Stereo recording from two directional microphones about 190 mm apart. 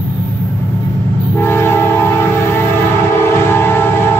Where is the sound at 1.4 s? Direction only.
10° left (ahead or behind).